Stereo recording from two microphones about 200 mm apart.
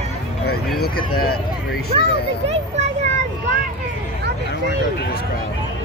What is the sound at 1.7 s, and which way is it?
Speech, 55° left (ahead or behind).